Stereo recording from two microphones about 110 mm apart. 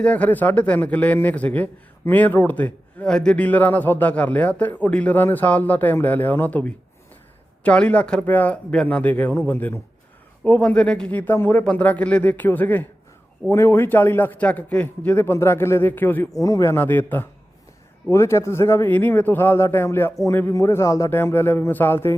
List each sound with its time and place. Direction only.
0.0 s a man's voice: 15° left (ahead or behind)
16.3 s speech: 30° left (ahead or behind)
16.7 s a man's voice: 15° left (ahead or behind)